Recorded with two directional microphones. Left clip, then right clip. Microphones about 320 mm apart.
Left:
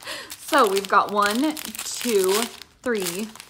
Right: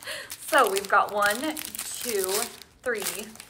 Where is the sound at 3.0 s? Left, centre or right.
Centre.